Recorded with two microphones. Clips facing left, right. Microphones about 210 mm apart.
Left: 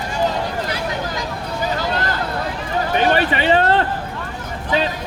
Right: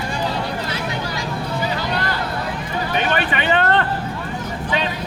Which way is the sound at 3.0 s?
35° left (ahead or behind).